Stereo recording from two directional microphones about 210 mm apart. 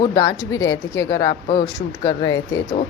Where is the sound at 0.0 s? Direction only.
15° left (ahead or behind).